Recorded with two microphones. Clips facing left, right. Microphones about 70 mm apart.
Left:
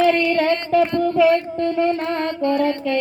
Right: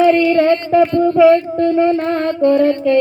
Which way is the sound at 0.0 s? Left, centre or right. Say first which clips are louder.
Right 5 dB; right.